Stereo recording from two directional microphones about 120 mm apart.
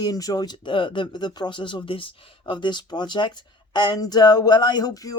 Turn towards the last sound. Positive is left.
turn(degrees=30)  # may be behind; listen again after turning